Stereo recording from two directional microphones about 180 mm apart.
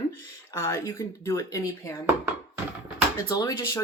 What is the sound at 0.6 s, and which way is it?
Speech, 15° left (ahead or behind).